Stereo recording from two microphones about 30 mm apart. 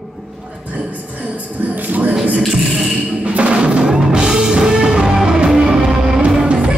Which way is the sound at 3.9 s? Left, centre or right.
Right.